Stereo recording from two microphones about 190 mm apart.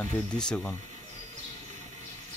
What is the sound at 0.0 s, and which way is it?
Speech, 5° left (ahead or behind).